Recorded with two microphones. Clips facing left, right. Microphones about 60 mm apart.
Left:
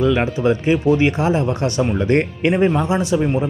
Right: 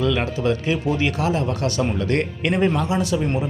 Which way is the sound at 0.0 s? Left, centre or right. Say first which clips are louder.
Left 4 dB; left.